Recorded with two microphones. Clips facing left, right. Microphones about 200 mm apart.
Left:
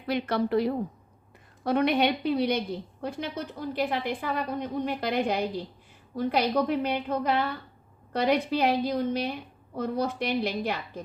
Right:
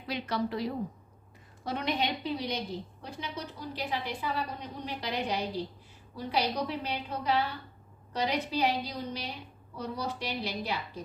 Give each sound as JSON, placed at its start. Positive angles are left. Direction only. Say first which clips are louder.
{"t": 0.1, "sound": "a woman's voice", "louder": "left 7 dB", "side_deg": 55}